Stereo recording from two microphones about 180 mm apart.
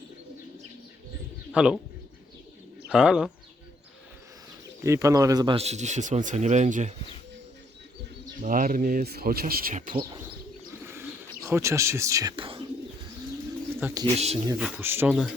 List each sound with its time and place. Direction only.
1.5 s speech: 5° right (ahead or behind)
2.9 s speech: 5° right (ahead or behind)
4.8 s speech: 15° right (ahead or behind)
5.5 s speech: 40° right (ahead or behind)
8.4 s speech: 50° right (ahead or behind)
9.9 s speech: 30° right (ahead or behind)
10.8 s bird: 15° right (ahead or behind)
11.4 s speech: 15° right (ahead or behind)
12.4 s speech: 30° right (ahead or behind)
13.7 s speech: 10° right (ahead or behind)
14.0 s speech: 35° right (ahead or behind)
14.6 s speech: 10° right (ahead or behind)